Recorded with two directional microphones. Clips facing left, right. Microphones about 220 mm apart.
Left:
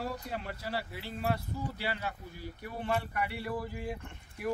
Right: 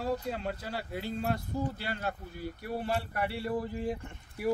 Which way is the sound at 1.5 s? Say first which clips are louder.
Right 5 dB; 50° right (ahead or behind).